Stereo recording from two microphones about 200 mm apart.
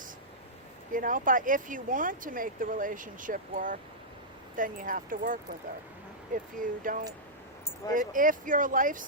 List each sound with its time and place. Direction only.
0.9 s speech: 40° right (ahead or behind)